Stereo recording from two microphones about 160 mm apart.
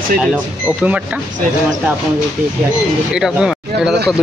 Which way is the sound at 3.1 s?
5° right (ahead or behind).